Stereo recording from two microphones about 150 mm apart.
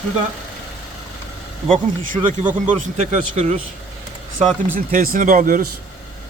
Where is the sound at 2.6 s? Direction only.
55° right (ahead or behind).